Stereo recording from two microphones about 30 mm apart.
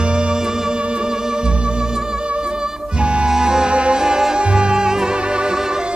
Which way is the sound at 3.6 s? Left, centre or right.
Right.